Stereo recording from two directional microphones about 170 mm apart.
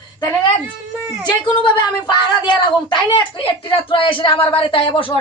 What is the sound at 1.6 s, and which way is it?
A woman's voice, 25° left (ahead or behind).